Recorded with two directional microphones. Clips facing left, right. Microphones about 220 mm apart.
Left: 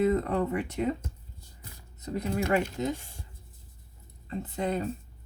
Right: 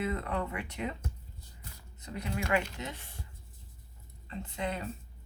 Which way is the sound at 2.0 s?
40° left (ahead or behind).